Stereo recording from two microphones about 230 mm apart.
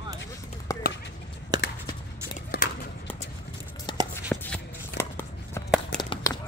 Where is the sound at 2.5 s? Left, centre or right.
Left.